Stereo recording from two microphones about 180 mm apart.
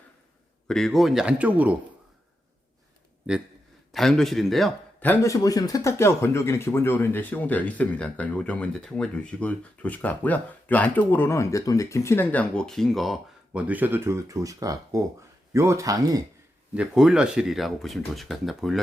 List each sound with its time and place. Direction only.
0.7 s speech: centre (ahead or behind)
3.3 s a man's voice: 5° right (ahead or behind)
16.7 s speech: 5° right (ahead or behind)